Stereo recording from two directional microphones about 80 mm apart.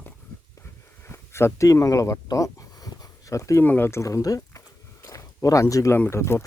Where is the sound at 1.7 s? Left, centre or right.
Left.